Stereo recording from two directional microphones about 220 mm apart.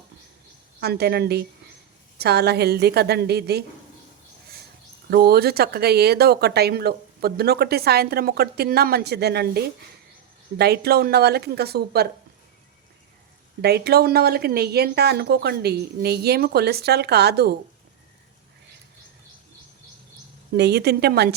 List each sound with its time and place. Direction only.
0.8 s speech: 45° right (ahead or behind)
5.0 s speech: 45° right (ahead or behind)
13.6 s speech: 45° right (ahead or behind)
20.6 s speech: 50° right (ahead or behind)